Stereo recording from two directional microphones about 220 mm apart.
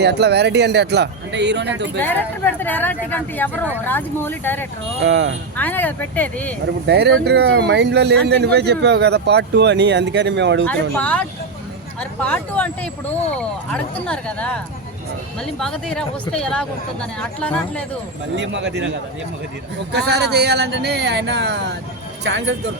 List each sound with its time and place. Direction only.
0.0 s speech: 50° right (ahead or behind)
2.0 s speech: 10° left (ahead or behind)
5.0 s speech: 55° right (ahead or behind)
5.5 s speech: 5° left (ahead or behind)
6.8 s speech: 50° right (ahead or behind)
10.9 s speech: 5° left (ahead or behind)
18.3 s speech: 55° right (ahead or behind)
19.9 s speech: 50° right (ahead or behind)